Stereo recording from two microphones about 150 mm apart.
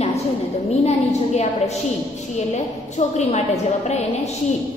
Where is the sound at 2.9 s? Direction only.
50° left (ahead or behind).